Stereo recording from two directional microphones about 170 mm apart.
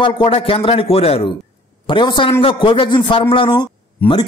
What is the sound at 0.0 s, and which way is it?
A man's voice, 30° left (ahead or behind).